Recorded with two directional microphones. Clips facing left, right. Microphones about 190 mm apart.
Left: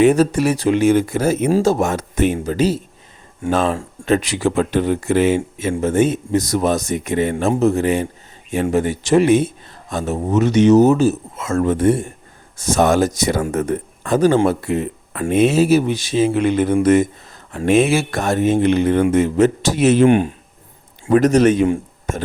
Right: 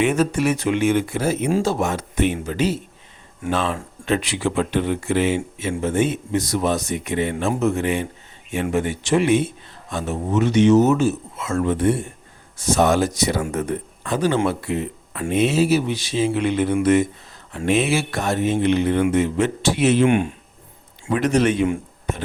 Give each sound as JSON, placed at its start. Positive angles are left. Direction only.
{"t": 0.0, "sound": "a man's voice", "side_deg": 35}